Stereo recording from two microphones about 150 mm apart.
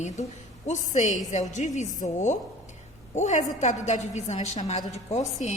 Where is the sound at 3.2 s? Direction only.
50° left (ahead or behind).